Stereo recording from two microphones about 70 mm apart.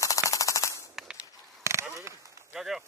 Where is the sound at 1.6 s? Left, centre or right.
Right.